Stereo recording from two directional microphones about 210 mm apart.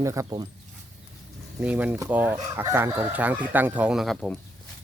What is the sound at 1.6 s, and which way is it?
Speech, 5° right (ahead or behind).